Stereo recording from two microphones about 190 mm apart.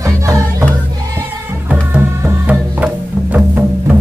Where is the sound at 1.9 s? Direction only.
10° right (ahead or behind).